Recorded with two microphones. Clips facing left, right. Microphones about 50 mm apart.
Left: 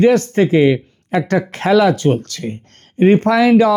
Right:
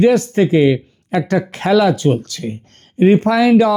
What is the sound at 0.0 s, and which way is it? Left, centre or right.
Speech, left.